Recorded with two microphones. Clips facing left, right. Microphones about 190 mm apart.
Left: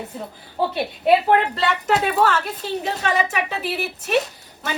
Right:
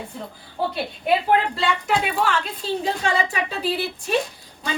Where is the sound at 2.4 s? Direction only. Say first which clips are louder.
Even; 20° left (ahead or behind).